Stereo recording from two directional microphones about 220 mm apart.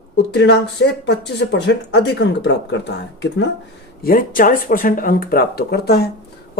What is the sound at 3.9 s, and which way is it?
Speech, 40° left (ahead or behind).